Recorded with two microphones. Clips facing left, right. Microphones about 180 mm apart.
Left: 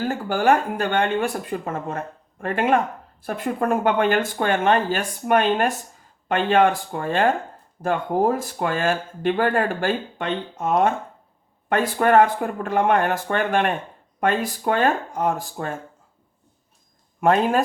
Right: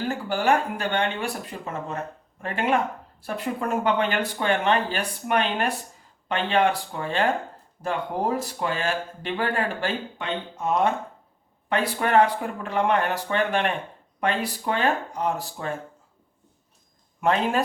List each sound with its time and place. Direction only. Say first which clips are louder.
0.1 s speech: left 3 dB; 50° left (ahead or behind)
17.2 s speech: left 4 dB; 50° left (ahead or behind)